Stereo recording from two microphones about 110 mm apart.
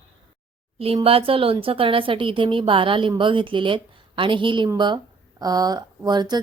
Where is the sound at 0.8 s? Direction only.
60° right (ahead or behind).